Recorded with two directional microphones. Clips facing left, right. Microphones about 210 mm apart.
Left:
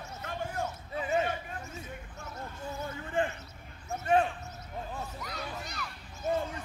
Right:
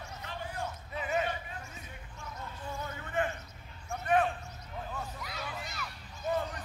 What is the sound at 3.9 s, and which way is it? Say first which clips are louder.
Basketball bounce: left 2 dB; 25° left (ahead or behind).